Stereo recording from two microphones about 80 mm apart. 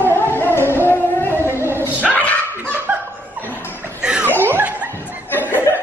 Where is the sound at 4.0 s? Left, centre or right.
Centre.